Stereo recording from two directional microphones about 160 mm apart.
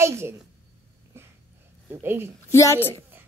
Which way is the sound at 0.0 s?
15° right (ahead or behind).